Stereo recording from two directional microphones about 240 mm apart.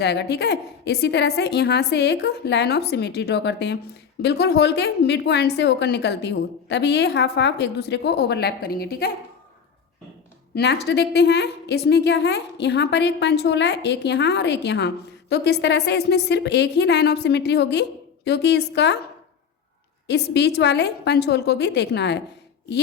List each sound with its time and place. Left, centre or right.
0.0 s a woman's voice: left
10.5 s a woman's voice: left
20.1 s a woman's voice: left